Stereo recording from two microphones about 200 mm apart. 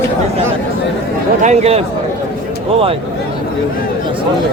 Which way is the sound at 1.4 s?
30° right (ahead or behind).